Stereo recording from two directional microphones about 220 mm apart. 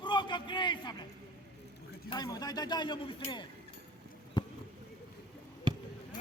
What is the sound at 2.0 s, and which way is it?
Speech, 20° left (ahead or behind).